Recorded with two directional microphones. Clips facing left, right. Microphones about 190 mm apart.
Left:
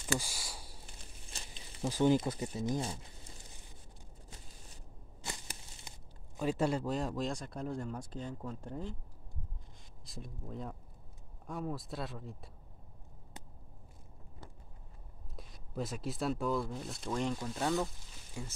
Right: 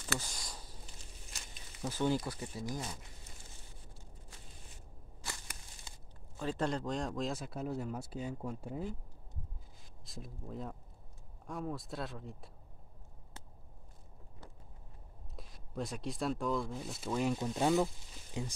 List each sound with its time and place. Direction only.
0.0 s a sound: 10° left (ahead or behind)
1.3 s a sound: 30° left (ahead or behind)
1.9 s speech: 15° left (ahead or behind)
5.2 s speech: 20° left (ahead or behind); by 8.9 s 10° right (ahead or behind)
10.0 s speech: centre (ahead or behind)
15.3 s speech: centre (ahead or behind)
17.4 s speech: 15° right (ahead or behind)